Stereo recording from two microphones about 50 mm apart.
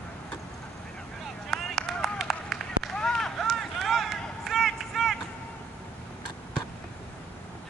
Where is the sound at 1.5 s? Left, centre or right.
Centre.